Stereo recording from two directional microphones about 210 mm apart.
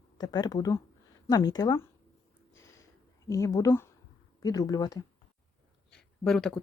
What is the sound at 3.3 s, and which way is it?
Speech, 15° left (ahead or behind).